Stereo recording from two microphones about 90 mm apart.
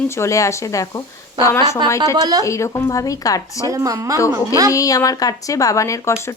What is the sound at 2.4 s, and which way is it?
Speech, 35° left (ahead or behind).